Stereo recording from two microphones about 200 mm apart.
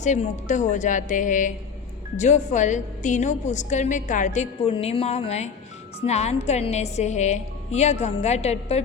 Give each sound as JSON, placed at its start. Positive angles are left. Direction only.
{"t": 0.0, "sound": "a woman's voice", "side_deg": 35}